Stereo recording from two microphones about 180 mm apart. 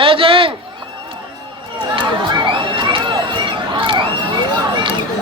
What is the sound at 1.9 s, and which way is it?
Crowd, 25° right (ahead or behind).